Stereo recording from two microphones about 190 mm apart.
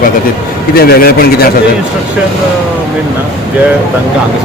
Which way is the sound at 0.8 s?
50° left (ahead or behind).